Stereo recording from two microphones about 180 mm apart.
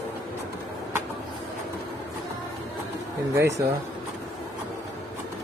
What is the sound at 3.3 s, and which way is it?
Speech, 15° right (ahead or behind).